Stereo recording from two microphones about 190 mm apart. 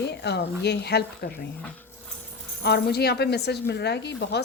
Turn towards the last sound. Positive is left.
turn(degrees=60)  # may be behind; listen again after turning